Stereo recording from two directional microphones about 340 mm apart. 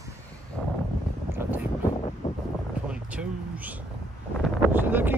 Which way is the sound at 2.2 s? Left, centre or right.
Left.